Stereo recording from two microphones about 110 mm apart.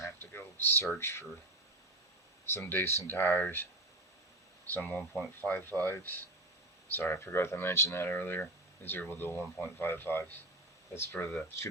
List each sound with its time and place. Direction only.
0.0 s a sound: 20° left (ahead or behind)
2.5 s speech: 20° left (ahead or behind)
4.7 s speech: 15° left (ahead or behind)